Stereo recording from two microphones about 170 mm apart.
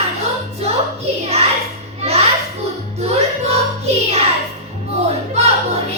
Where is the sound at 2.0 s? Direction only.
35° right (ahead or behind).